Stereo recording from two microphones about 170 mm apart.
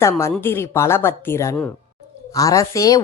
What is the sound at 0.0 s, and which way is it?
A woman's voice, 15° left (ahead or behind).